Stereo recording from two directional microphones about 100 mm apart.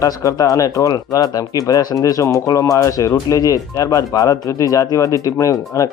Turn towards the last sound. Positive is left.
turn(degrees=35)  # may be behind; listen again after turning